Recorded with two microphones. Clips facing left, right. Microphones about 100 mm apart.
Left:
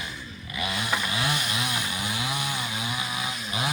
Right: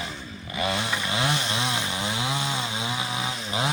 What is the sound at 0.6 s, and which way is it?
Chainsaw, 30° right (ahead or behind).